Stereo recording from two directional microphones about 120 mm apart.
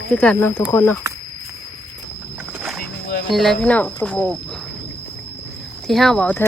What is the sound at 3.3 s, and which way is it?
Speech, centre (ahead or behind).